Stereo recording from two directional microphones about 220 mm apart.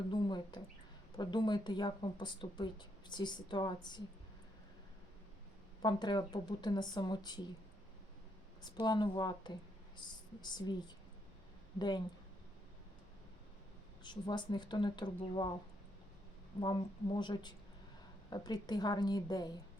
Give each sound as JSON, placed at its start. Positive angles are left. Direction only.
{"t": 0.1, "sound": "speech", "side_deg": 20}
{"t": 5.8, "sound": "speech", "side_deg": 20}
{"t": 8.6, "sound": "speech", "side_deg": 20}
{"t": 14.0, "sound": "speech", "side_deg": 20}
{"t": 16.6, "sound": "speech", "side_deg": 20}